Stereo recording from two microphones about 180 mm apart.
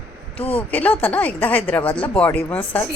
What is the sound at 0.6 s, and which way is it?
Speech, 10° left (ahead or behind).